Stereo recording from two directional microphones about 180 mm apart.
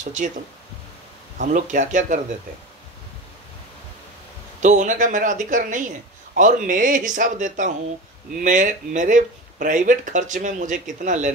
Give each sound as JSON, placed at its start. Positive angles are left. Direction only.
{"t": 0.0, "sound": "speech", "side_deg": -45}
{"t": 1.4, "sound": "speech", "side_deg": -45}
{"t": 4.6, "sound": "speech", "side_deg": -45}